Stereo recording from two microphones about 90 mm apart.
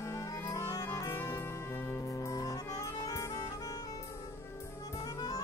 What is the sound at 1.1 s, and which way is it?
Music, 25° left (ahead or behind).